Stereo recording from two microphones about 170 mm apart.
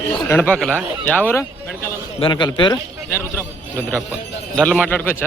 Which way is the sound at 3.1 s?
15° left (ahead or behind).